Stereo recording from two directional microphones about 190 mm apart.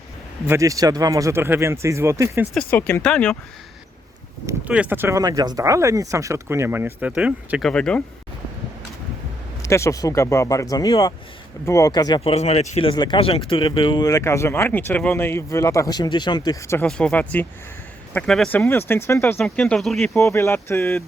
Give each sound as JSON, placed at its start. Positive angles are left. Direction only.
{"t": 0.4, "sound": "speech", "side_deg": -15}
{"t": 2.6, "sound": "speech", "side_deg": 10}
{"t": 4.4, "sound": "speech", "side_deg": -5}
{"t": 7.7, "sound": "speech", "side_deg": 5}
{"t": 9.6, "sound": "speech", "side_deg": 15}
{"t": 20.1, "sound": "speech", "side_deg": 15}